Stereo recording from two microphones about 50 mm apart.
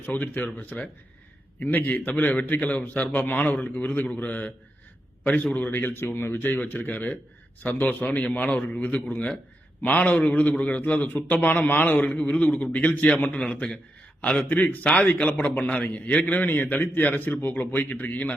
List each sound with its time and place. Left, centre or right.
0.0 s a man's voice: left
1.5 s a man's voice: left
3.1 s a man's voice: left
3.4 s a man's voice: left
13.4 s a man's voice: left